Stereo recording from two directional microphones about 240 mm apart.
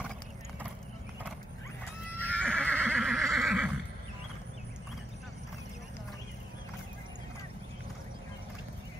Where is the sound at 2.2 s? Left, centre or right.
Centre.